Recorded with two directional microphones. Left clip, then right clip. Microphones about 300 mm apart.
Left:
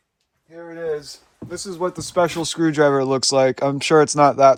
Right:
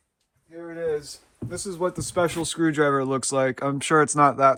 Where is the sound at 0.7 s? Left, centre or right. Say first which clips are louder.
Left 1 dB; left.